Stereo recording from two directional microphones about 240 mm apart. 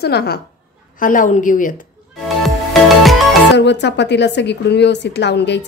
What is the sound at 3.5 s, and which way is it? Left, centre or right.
A woman's voice, left.